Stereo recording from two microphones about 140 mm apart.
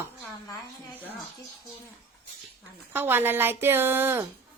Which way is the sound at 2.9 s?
15° right (ahead or behind).